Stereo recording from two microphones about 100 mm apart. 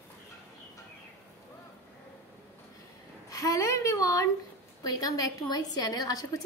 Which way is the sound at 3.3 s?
35° left (ahead or behind).